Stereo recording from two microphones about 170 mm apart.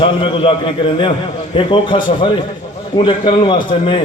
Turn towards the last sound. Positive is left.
turn(degrees=30)  # may be behind; listen again after turning